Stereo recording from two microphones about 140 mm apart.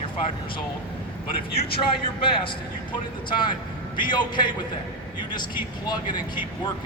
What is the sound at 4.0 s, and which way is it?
A man's voice, 35° left (ahead or behind).